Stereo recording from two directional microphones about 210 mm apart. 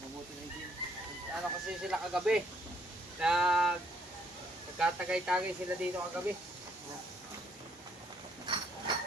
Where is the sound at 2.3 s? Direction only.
Centre (ahead or behind).